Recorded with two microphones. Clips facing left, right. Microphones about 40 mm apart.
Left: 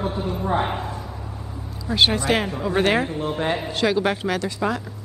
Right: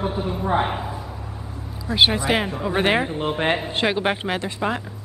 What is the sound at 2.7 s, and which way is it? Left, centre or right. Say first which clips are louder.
Speech: even; right.